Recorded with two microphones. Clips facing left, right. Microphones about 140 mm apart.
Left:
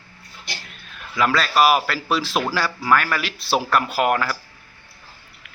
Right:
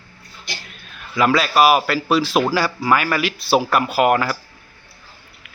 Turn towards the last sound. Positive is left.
turn(degrees=-10)  # may be behind; listen again after turning